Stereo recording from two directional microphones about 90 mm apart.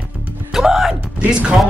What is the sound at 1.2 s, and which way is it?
Speech, 10° right (ahead or behind).